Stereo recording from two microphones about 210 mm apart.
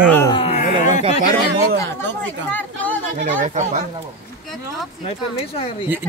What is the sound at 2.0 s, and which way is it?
Speech, 10° left (ahead or behind).